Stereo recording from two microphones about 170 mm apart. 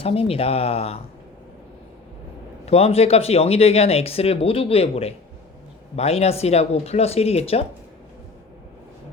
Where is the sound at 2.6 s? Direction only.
35° left (ahead or behind).